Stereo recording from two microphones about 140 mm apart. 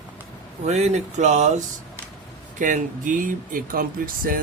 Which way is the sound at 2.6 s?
70° right (ahead or behind).